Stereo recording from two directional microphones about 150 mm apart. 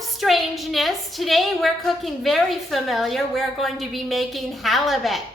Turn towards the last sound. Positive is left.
turn(degrees=0)  # may be behind; listen again after turning